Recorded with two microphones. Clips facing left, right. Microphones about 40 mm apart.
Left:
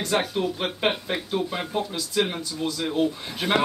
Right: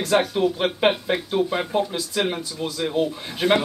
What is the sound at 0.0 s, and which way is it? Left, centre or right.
Speech, centre.